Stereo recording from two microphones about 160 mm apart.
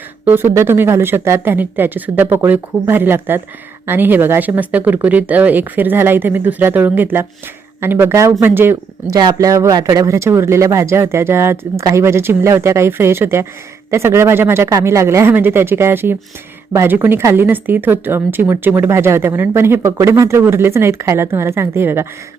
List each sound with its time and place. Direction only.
0.3 s speech: 15° right (ahead or behind)